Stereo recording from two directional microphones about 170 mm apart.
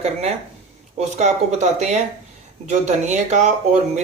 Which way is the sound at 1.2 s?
40° right (ahead or behind).